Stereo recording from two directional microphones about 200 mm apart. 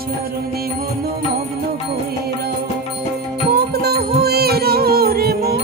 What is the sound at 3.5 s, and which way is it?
Music, 50° right (ahead or behind).